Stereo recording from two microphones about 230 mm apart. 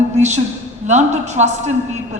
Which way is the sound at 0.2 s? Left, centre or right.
Right.